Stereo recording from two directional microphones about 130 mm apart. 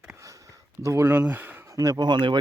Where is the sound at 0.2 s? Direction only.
25° right (ahead or behind).